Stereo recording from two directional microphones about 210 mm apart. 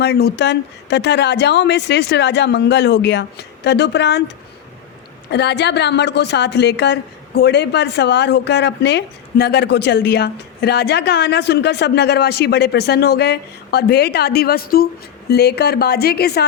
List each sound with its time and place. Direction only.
0.0 s a woman's voice: 50° left (ahead or behind)
5.3 s a woman's voice: 55° left (ahead or behind)